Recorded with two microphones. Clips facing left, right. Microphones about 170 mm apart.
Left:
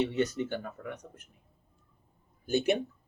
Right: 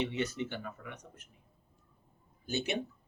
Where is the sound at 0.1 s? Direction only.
45° left (ahead or behind).